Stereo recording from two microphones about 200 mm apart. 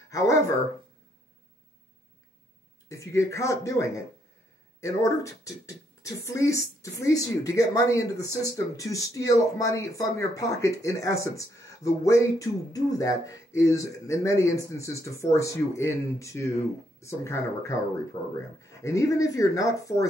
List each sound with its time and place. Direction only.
0.1 s speech: 15° left (ahead or behind)
2.9 s speech: 15° left (ahead or behind)